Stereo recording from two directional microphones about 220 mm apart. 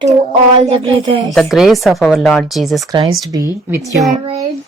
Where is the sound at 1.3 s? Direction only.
Centre (ahead or behind).